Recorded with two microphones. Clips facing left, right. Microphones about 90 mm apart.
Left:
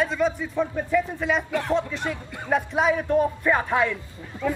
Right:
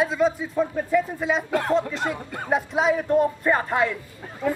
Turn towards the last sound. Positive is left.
turn(degrees=-15)  # may be behind; listen again after turning